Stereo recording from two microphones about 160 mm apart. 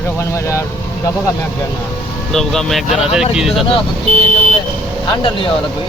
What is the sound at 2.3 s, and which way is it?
Speech, centre (ahead or behind).